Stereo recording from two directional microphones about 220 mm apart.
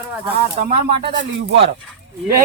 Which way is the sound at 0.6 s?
50° right (ahead or behind).